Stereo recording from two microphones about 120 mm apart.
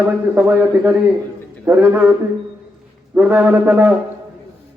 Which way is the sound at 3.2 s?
10° right (ahead or behind).